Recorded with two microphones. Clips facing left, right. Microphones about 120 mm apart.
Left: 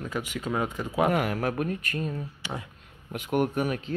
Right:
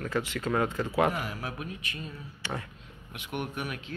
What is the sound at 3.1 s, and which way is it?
Speech, 40° left (ahead or behind).